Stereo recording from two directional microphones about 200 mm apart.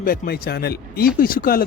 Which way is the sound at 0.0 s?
45° left (ahead or behind).